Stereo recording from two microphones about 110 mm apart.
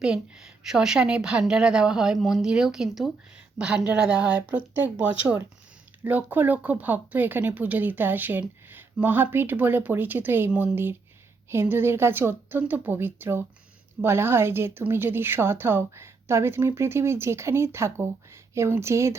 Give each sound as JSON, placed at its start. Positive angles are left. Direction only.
{"t": 0.0, "sound": "a woman's voice", "side_deg": -5}